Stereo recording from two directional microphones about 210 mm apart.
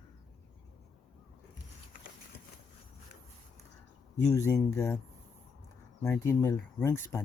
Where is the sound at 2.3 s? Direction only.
50° left (ahead or behind).